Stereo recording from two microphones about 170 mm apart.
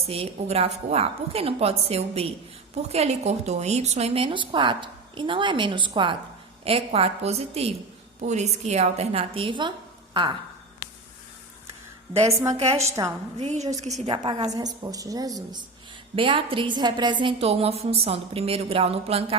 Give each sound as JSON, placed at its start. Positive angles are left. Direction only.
{"t": 0.0, "sound": "a woman's voice", "side_deg": -35}
{"t": 12.2, "sound": "a woman's voice", "side_deg": -20}
{"t": 12.5, "sound": "a woman's voice", "side_deg": -40}
{"t": 13.0, "sound": "a woman's voice", "side_deg": -20}
{"t": 13.4, "sound": "a woman's voice", "side_deg": -40}
{"t": 16.1, "sound": "a woman's voice", "side_deg": -30}